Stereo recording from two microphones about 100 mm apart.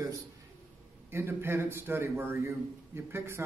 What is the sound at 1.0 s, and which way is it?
Speech, 25° right (ahead or behind).